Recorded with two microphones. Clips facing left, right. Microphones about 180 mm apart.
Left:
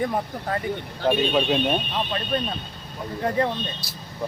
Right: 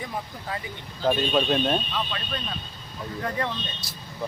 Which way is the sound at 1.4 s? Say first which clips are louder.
Left 1 dB; 10° left (ahead or behind).